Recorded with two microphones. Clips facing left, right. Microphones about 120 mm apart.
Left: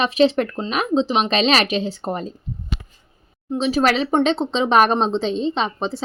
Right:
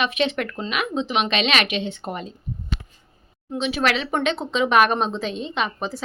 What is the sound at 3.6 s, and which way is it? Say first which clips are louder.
A woman's voice: left 4 dB; 35° left (ahead or behind).